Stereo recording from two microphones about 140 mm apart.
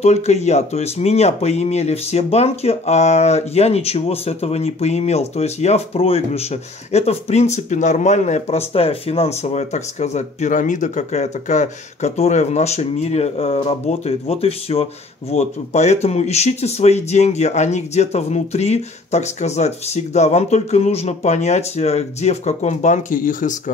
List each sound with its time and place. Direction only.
0.0 s speech: 50° left (ahead or behind); by 23.5 s 70° left (ahead or behind)